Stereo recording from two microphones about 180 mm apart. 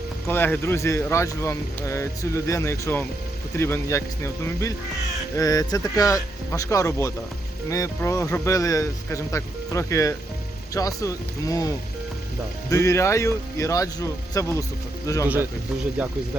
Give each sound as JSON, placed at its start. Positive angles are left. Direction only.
{"t": 0.3, "sound": "speech", "side_deg": 10}
{"t": 12.7, "sound": "speech", "side_deg": 15}
{"t": 16.0, "sound": "speech", "side_deg": -5}